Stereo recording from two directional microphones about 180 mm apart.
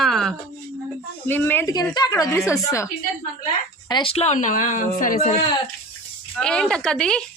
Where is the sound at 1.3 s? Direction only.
10° left (ahead or behind).